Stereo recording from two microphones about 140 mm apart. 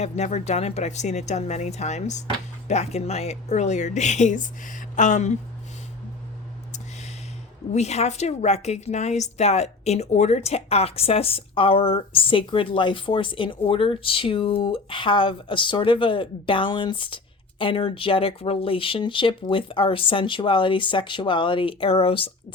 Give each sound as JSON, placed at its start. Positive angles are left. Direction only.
{"t": 0.0, "sound": "speech", "side_deg": 55}
{"t": 7.7, "sound": "a woman's voice", "side_deg": 50}